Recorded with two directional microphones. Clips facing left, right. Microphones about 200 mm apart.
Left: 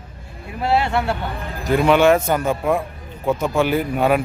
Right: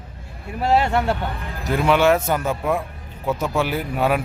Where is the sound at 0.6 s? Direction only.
40° right (ahead or behind).